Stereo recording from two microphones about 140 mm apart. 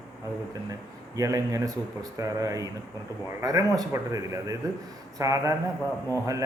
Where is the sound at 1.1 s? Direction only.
25° right (ahead or behind).